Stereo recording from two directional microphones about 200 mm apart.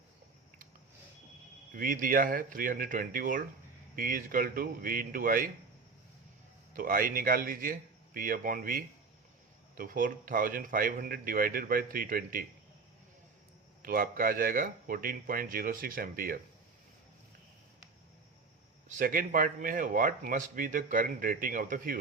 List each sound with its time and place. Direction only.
1.7 s speech: 45° right (ahead or behind)
6.7 s speech: 45° right (ahead or behind)
13.8 s speech: 45° right (ahead or behind)
18.9 s speech: 40° right (ahead or behind)